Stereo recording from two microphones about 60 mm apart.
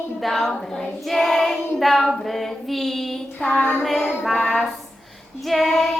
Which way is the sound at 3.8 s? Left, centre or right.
Centre.